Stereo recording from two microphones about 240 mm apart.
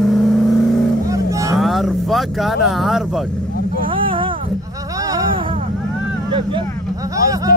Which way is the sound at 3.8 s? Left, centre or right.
Right.